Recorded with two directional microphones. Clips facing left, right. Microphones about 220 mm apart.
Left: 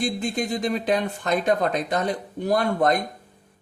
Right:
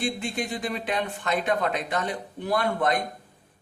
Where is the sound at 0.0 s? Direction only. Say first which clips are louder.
Left 3 dB; 40° left (ahead or behind).